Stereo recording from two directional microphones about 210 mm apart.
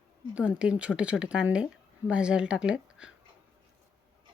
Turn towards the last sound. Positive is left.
turn(degrees=-5)  # may be behind; listen again after turning